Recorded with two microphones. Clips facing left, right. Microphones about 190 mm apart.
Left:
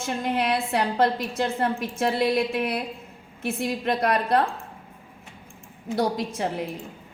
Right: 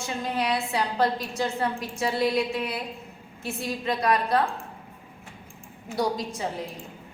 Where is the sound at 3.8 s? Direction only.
55° left (ahead or behind).